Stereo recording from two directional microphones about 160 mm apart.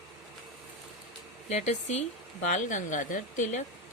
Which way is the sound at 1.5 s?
45° left (ahead or behind).